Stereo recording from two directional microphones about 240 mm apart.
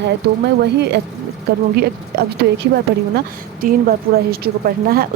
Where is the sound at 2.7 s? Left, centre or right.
Right.